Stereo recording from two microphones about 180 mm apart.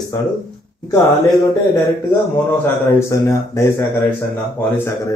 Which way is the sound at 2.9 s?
15° left (ahead or behind).